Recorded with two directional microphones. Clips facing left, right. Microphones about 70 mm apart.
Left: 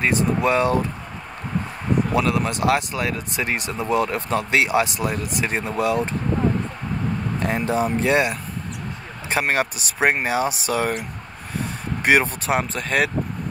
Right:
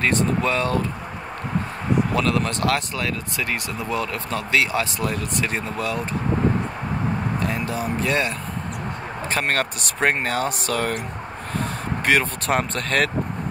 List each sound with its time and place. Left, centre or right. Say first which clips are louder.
0.0 s speech: even; centre
0.4 s speech: left 3 dB; centre
2.1 s speech: left 1 dB; centre
7.4 s speech: left 4 dB; left; by 11.0 s centre
12.0 s speech: left 2 dB; centre
12.4 s speech: even; centre